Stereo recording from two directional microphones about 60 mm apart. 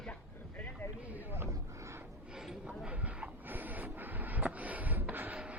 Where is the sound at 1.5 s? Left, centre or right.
Right.